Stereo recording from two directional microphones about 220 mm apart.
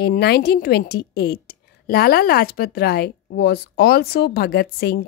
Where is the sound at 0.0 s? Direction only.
45° left (ahead or behind).